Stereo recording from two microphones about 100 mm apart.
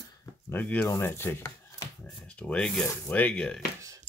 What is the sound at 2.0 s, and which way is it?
Speech, 10° left (ahead or behind).